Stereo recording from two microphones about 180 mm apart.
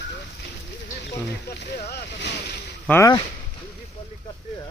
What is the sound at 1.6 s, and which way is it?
Boat, 65° left (ahead or behind).